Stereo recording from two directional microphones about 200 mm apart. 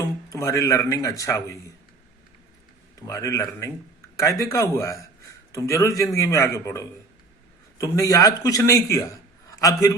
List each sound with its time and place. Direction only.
0.0 s speech: 15° left (ahead or behind)
3.1 s a man's voice: 15° left (ahead or behind)